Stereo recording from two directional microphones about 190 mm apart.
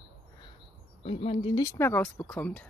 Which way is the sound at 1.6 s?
10° left (ahead or behind).